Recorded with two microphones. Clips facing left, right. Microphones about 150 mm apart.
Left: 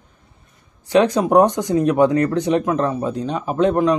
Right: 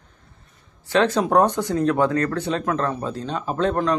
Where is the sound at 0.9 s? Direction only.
15° left (ahead or behind).